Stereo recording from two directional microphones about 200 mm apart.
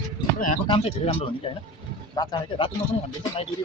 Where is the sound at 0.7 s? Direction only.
30° left (ahead or behind).